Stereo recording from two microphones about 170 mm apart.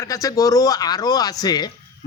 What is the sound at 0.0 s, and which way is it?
Speech, 20° left (ahead or behind).